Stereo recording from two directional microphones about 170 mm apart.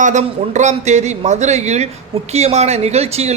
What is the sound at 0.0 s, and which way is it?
A man's voice, 45° right (ahead or behind).